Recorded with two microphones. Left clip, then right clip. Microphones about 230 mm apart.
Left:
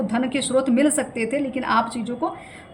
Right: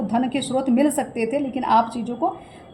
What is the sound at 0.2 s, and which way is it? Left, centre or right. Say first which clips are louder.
A woman's voice: left 2 dB; left.